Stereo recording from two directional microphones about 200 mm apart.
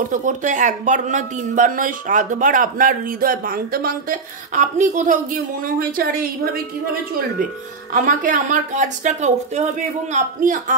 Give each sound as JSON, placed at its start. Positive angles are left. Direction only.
{"t": 0.1, "sound": "speech", "side_deg": -40}
{"t": 7.9, "sound": "speech", "side_deg": -40}